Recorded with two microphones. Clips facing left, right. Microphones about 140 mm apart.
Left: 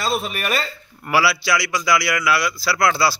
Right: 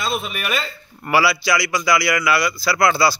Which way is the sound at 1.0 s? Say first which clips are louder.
Right 1 dB; centre (ahead or behind).